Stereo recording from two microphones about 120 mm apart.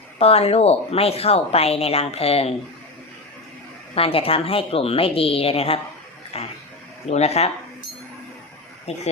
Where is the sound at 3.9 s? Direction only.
50° left (ahead or behind).